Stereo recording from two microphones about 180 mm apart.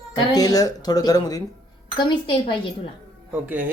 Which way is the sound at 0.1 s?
20° left (ahead or behind).